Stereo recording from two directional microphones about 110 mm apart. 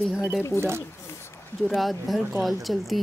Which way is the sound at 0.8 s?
25° left (ahead or behind).